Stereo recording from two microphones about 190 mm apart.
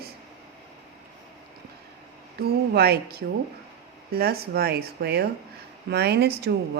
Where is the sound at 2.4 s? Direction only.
55° right (ahead or behind).